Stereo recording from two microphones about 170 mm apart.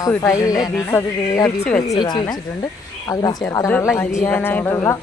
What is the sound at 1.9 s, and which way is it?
Speech, 25° left (ahead or behind).